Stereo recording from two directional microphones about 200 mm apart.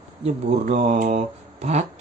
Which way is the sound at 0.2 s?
35° right (ahead or behind).